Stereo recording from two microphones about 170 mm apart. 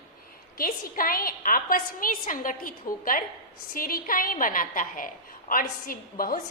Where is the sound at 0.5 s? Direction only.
55° left (ahead or behind).